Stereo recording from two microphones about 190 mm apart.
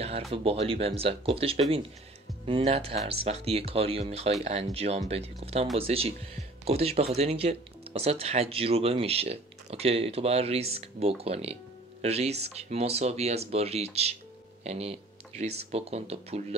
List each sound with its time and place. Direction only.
0.3 s speech: 30° right (ahead or behind)